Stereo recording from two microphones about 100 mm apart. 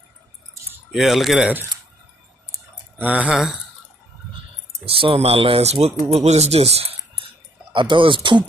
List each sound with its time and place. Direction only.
0.9 s speech: centre (ahead or behind)
3.0 s speech: 15° right (ahead or behind)
4.8 s speech: 70° right (ahead or behind)
7.7 s speech: 55° right (ahead or behind)